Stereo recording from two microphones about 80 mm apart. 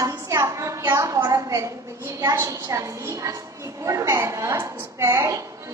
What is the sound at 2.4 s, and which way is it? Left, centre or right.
A woman's voice, right.